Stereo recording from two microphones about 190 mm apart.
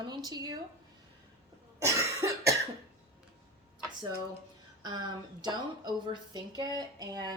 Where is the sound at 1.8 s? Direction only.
15° right (ahead or behind).